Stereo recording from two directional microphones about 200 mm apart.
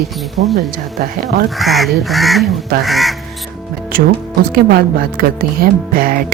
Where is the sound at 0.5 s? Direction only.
50° right (ahead or behind).